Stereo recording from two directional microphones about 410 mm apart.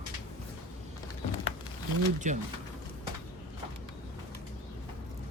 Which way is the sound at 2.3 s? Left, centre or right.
Centre.